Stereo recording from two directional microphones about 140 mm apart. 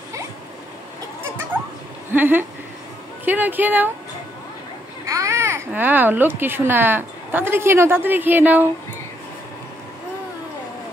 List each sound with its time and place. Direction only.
2.1 s a woman's voice: 15° right (ahead or behind)
5.0 s a sound: 20° right (ahead or behind)
5.7 s a woman's voice: 10° right (ahead or behind)